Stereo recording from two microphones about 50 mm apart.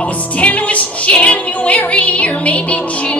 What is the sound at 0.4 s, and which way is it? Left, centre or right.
Music, left.